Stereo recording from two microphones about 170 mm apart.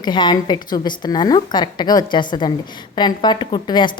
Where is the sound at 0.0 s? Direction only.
25° left (ahead or behind).